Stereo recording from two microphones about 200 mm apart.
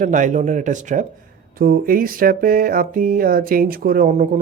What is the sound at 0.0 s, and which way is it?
Speech, 40° right (ahead or behind).